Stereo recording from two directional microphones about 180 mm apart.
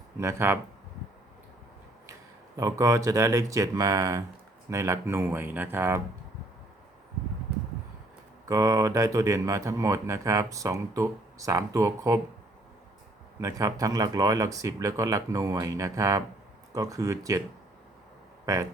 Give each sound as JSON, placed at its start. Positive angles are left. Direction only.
{"t": 0.2, "sound": "speech", "side_deg": -15}
{"t": 2.6, "sound": "speech", "side_deg": -20}
{"t": 8.4, "sound": "speech", "side_deg": -20}
{"t": 13.4, "sound": "speech", "side_deg": -20}
{"t": 18.4, "sound": "speech", "side_deg": -15}